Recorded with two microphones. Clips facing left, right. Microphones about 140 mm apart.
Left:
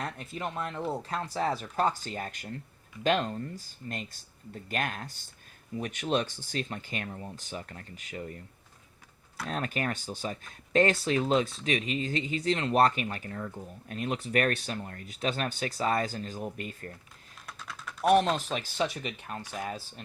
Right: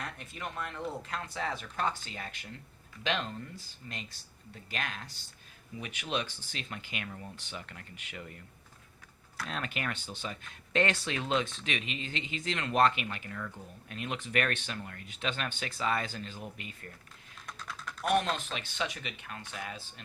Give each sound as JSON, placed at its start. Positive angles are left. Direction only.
{"t": 0.0, "sound": "speech", "side_deg": 40}
{"t": 9.5, "sound": "speech", "side_deg": 40}
{"t": 17.4, "sound": "duck", "side_deg": 5}
{"t": 18.3, "sound": "speech", "side_deg": 40}